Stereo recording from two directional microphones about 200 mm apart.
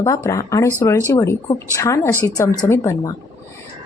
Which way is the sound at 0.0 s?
15° left (ahead or behind).